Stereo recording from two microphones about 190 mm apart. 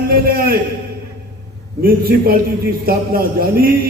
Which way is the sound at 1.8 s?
50° right (ahead or behind).